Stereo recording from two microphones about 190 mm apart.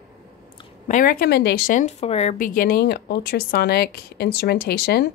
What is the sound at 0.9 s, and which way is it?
A woman's voice, 45° left (ahead or behind).